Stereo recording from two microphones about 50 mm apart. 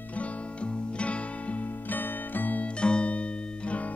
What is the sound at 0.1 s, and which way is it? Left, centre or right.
Music, left.